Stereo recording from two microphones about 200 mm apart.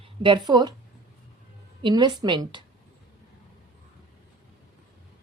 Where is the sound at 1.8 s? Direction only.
20° right (ahead or behind).